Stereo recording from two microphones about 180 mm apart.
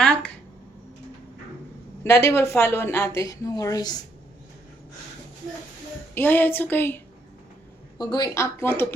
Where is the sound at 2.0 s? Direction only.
15° left (ahead or behind).